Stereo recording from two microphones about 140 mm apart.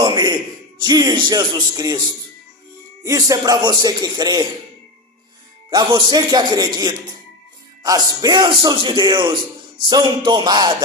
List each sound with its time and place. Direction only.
0.0 s a sound: 30° right (ahead or behind)
0.8 s speech: 30° right (ahead or behind)
3.0 s speech: 25° right (ahead or behind)
5.7 s a man's voice: 30° right (ahead or behind)